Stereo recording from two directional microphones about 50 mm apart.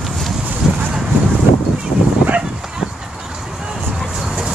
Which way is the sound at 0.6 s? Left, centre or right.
Centre.